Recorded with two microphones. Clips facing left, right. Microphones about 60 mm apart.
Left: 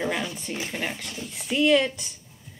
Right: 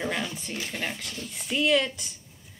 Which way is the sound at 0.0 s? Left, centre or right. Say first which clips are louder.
Left 2 dB; centre.